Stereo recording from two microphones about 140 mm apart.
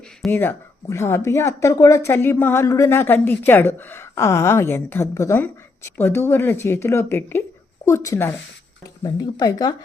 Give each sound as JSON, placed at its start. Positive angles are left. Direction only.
{"t": 0.3, "sound": "speech", "side_deg": 15}